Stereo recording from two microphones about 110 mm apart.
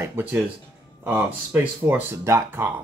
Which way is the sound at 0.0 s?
20° right (ahead or behind).